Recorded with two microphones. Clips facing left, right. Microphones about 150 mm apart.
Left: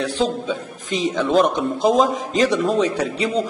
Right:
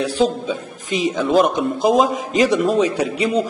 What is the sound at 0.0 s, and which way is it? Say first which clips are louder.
A man's voice: right 3 dB; 10° right (ahead or behind).